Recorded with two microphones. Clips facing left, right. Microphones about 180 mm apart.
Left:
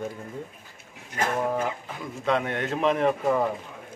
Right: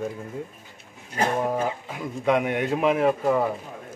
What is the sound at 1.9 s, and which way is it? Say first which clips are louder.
Speech: right 5 dB; 15° right (ahead or behind).